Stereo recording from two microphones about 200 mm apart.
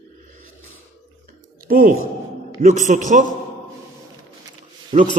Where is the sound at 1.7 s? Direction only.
45° right (ahead or behind).